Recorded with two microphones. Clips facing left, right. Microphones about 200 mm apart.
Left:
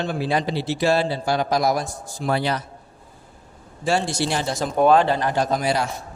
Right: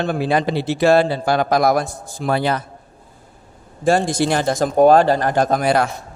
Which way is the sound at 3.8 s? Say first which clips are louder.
Right 6 dB; 50° right (ahead or behind).